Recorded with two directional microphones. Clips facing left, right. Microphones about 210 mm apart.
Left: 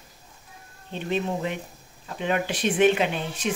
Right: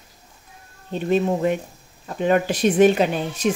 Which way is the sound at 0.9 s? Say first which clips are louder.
Right 7 dB; 45° right (ahead or behind).